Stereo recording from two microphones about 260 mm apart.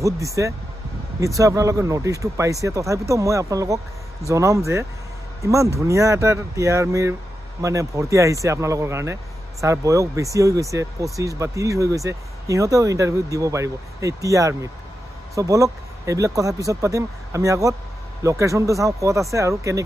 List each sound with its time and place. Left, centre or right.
0.0 s speech: centre